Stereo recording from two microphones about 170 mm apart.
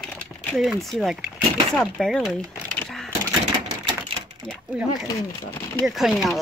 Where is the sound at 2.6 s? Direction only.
5° left (ahead or behind).